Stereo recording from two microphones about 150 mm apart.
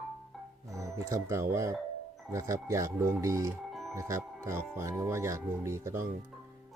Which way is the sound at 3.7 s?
Centre (ahead or behind).